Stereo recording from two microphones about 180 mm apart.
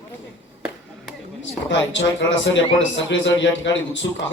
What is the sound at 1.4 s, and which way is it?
Speech, 90° left.